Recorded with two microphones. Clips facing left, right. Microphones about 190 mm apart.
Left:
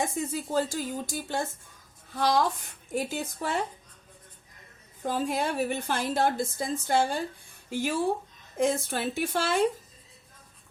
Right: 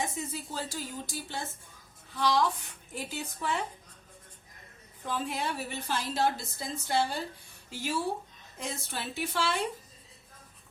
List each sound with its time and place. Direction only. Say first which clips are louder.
0.2 s a woman's voice: left 8 dB; 45° left (ahead or behind)
5.0 s a woman's voice: left 5 dB; 45° left (ahead or behind)